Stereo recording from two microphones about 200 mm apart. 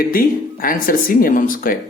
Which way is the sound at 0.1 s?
45° left (ahead or behind).